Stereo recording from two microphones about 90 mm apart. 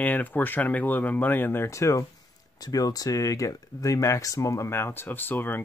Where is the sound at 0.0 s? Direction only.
20° left (ahead or behind).